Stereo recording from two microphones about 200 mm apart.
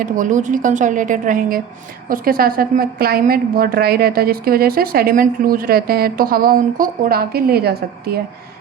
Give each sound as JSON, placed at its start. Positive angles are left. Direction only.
{"t": 0.0, "sound": "a woman's voice", "side_deg": -40}